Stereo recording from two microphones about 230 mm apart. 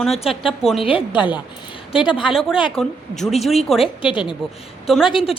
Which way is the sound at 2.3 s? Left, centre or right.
Centre.